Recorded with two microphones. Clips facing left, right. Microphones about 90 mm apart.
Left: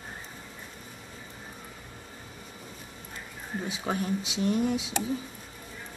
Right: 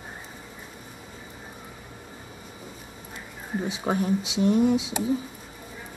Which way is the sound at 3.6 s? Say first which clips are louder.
Right 4 dB; 20° right (ahead or behind).